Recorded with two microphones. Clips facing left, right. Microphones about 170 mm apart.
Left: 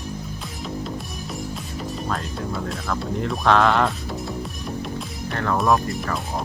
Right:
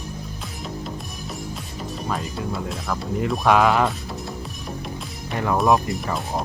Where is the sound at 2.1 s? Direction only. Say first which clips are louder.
Right 3 dB; centre (ahead or behind).